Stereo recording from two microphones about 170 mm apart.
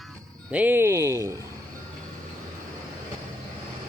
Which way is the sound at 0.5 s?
10° right (ahead or behind).